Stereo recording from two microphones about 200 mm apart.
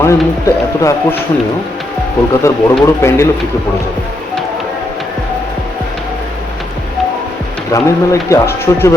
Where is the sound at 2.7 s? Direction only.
10° left (ahead or behind).